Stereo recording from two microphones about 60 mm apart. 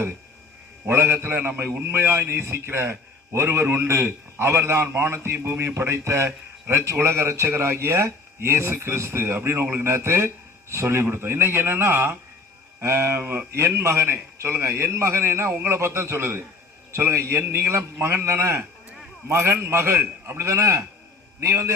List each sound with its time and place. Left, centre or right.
0.9 s a man's voice: right